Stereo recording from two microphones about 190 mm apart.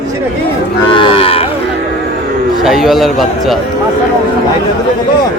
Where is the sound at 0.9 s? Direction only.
30° left (ahead or behind).